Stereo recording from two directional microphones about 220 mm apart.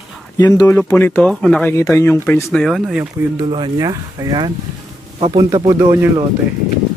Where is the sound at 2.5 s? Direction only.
Centre (ahead or behind).